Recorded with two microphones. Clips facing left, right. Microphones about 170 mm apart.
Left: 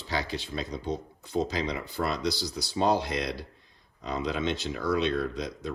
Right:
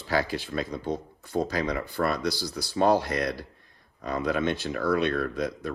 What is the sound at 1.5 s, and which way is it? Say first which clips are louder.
Speech: right 3 dB; 20° left (ahead or behind).